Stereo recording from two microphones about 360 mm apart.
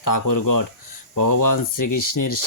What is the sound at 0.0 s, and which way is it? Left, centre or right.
Speech, left.